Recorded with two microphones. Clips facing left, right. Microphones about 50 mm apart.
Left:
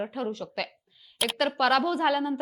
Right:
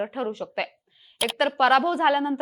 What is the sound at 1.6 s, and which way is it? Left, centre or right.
Speech, centre.